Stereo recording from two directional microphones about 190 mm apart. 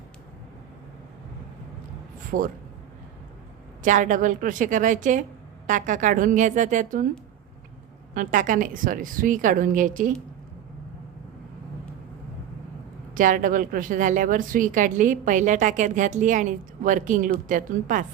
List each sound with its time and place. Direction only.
2.3 s a woman's voice: 50° right (ahead or behind)
3.8 s a woman's voice: 40° right (ahead or behind)
8.1 s a woman's voice: 45° right (ahead or behind)
13.1 s a woman's voice: 45° right (ahead or behind)